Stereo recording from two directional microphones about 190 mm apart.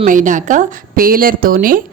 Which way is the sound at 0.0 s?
45° right (ahead or behind).